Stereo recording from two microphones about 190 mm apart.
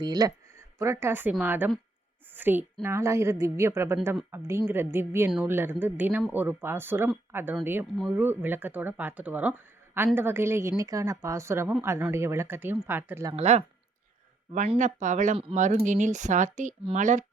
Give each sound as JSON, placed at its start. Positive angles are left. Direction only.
{"t": 0.0, "sound": "a woman's voice", "side_deg": -20}
{"t": 13.3, "sound": "speech", "side_deg": -35}